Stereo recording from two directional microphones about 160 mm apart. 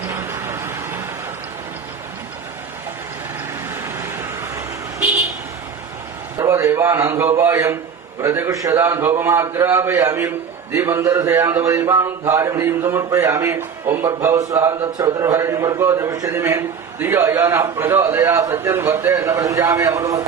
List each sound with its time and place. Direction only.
0.1 s vehicle: 15° right (ahead or behind)
3.8 s vehicle: 15° right (ahead or behind)
6.4 s a man's voice: 20° right (ahead or behind)